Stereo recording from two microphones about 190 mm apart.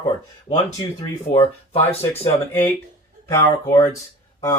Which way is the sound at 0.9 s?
25° left (ahead or behind).